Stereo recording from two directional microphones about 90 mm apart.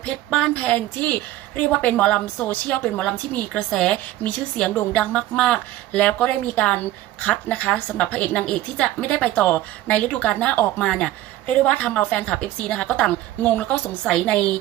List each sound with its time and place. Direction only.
0.0 s speech: 5° left (ahead or behind)
0.5 s a woman's voice: 15° left (ahead or behind)
11.4 s a woman's voice: 15° left (ahead or behind)